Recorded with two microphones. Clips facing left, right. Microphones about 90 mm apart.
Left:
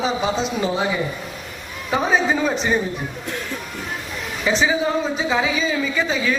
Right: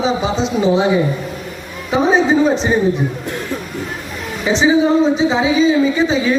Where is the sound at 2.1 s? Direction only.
30° right (ahead or behind).